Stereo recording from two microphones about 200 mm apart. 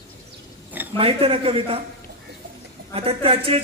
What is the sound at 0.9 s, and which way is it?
Speech, 30° right (ahead or behind).